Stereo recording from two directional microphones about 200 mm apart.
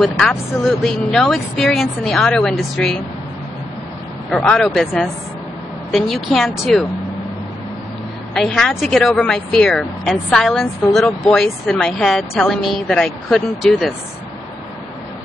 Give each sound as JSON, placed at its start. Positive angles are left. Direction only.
{"t": 0.0, "sound": "speech", "side_deg": 0}
{"t": 4.3, "sound": "speech", "side_deg": 5}
{"t": 8.4, "sound": "speech", "side_deg": 0}